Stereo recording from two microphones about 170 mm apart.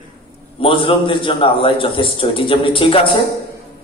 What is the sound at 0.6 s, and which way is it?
A man's voice, 30° left (ahead or behind).